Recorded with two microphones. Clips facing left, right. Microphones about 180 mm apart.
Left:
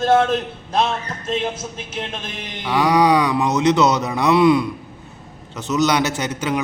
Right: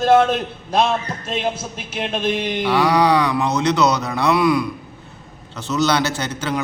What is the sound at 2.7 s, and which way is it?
A man's voice, 20° left (ahead or behind).